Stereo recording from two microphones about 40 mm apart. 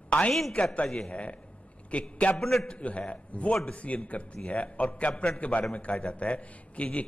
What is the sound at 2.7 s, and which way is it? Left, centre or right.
A man's voice, left.